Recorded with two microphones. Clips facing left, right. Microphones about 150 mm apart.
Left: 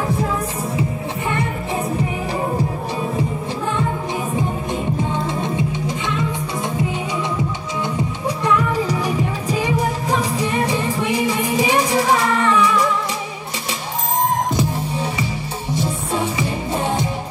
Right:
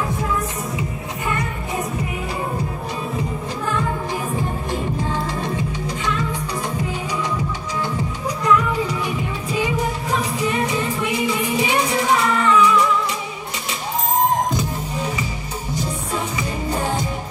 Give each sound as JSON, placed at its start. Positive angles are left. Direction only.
{"t": 5.1, "sound": "music", "side_deg": 20}
{"t": 8.5, "sound": "music", "side_deg": 35}
{"t": 15.7, "sound": "music", "side_deg": 30}